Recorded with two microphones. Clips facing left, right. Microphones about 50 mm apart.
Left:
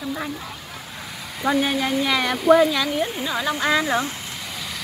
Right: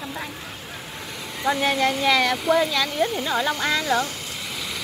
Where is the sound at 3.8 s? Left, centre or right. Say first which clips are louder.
Left 1 dB; left.